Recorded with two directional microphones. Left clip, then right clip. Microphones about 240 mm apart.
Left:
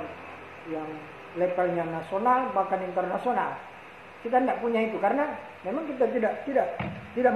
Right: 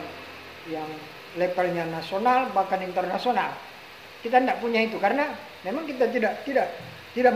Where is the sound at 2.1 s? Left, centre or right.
Right.